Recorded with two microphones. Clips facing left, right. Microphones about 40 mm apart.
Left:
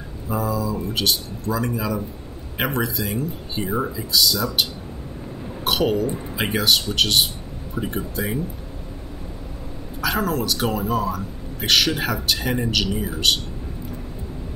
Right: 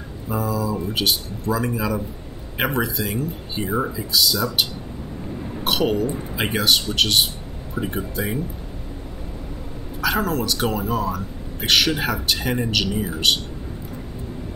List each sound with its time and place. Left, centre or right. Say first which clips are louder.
0.3 s speech: even; centre
10.0 s speech: right 1 dB; centre